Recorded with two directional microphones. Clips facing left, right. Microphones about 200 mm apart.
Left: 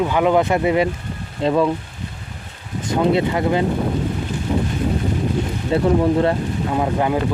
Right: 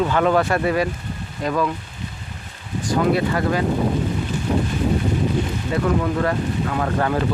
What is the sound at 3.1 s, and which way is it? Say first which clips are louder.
Speech: left 2 dB; 25° left (ahead or behind).